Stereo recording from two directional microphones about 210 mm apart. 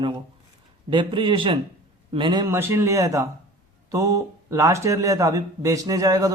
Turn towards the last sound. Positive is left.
turn(degrees=-15)  # may be behind; listen again after turning